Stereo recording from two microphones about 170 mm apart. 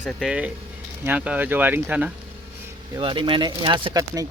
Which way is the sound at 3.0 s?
30° right (ahead or behind).